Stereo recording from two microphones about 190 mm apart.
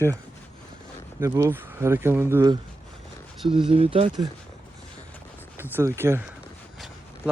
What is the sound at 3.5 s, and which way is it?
Speech, 25° right (ahead or behind).